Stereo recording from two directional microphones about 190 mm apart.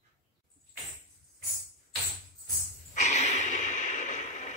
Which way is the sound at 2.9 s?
35° left (ahead or behind).